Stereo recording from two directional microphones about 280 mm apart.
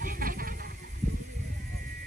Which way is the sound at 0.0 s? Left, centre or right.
Right.